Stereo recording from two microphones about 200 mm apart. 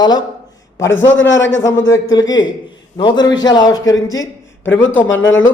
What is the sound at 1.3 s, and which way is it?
Speech, 70° left (ahead or behind).